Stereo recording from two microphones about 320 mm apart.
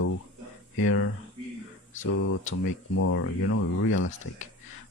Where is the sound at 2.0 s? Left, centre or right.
Left.